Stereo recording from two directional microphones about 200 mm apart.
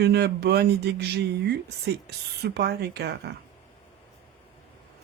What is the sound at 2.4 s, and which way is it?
Speech, 55° right (ahead or behind).